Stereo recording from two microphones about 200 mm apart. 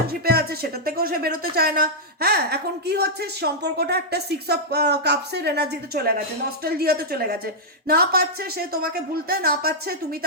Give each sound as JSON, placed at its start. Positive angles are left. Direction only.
{"t": 0.1, "sound": "speech", "side_deg": -50}